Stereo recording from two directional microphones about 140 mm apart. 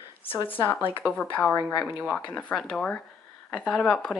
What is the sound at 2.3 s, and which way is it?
Speech, 10° left (ahead or behind).